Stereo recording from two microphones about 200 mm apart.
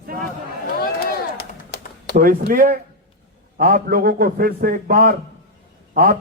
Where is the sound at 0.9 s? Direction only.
50° left (ahead or behind).